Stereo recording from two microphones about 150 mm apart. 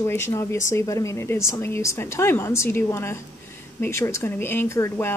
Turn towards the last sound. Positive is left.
turn(degrees=20)  # may be behind; listen again after turning